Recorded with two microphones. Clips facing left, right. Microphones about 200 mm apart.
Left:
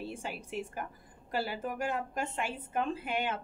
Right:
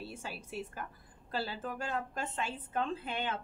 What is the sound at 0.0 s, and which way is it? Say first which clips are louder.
A woman's voice: left 4 dB; 15° left (ahead or behind).